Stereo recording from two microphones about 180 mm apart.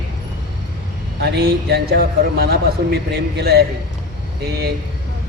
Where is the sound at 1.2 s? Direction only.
65° right (ahead or behind).